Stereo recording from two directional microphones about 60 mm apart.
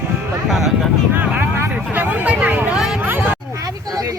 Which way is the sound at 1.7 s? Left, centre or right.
Right.